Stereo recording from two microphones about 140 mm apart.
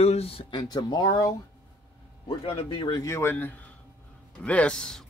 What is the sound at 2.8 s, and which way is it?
A man's voice, 25° left (ahead or behind).